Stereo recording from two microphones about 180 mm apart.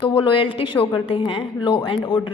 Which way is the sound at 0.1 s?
30° left (ahead or behind).